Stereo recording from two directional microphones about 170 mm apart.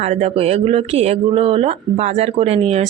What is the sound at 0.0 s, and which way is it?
Speech, 40° right (ahead or behind).